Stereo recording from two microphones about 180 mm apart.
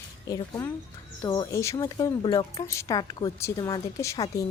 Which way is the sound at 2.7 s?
15° left (ahead or behind).